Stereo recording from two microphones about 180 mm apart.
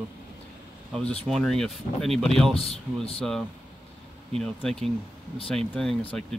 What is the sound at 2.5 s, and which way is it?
Speech, 35° left (ahead or behind).